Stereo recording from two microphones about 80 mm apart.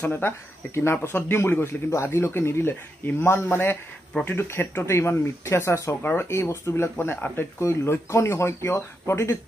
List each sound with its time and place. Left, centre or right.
0.0 s speech: left
6.0 s speech: left